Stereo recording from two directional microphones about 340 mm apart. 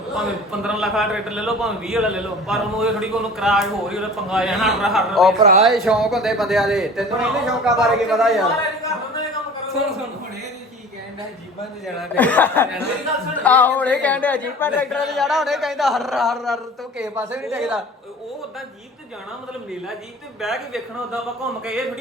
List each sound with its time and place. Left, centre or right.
0.2 s a man's voice: centre
5.4 s speech: centre
5.6 s a man's voice: centre
11.9 s a man's voice: centre
20.4 s a man's voice: centre